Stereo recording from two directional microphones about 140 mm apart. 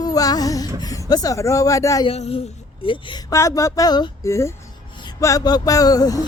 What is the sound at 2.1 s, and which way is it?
Speech, 45° left (ahead or behind).